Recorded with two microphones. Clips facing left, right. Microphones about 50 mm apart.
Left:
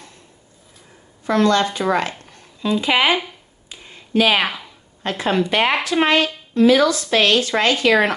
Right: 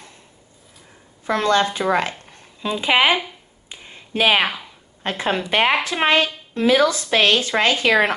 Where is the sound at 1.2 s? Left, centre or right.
Right.